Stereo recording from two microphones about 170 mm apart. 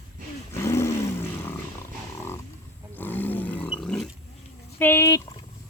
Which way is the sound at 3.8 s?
5° left (ahead or behind).